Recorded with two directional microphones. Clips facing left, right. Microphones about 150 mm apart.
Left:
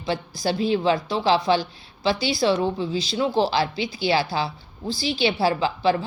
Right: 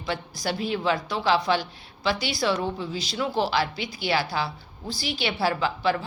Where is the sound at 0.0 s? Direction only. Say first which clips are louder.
Left 4 dB; 30° left (ahead or behind).